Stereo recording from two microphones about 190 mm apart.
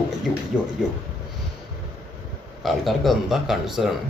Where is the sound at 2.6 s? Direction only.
Centre (ahead or behind).